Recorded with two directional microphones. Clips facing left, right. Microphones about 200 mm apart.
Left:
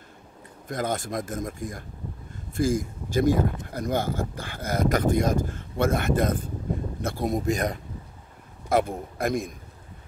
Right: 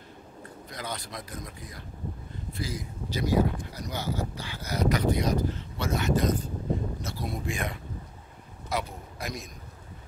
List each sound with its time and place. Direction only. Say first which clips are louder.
0.7 s speech: left 10 dB; 50° left (ahead or behind)
8.6 s speech: left 9 dB; 50° left (ahead or behind)